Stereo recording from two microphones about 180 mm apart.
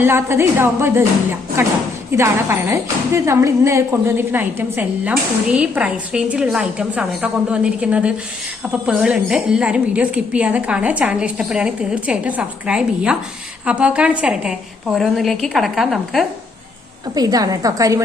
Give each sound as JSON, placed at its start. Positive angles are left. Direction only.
{"t": 0.0, "sound": "a woman's voice", "side_deg": -15}
{"t": 17.2, "sound": "a woman's voice", "side_deg": -20}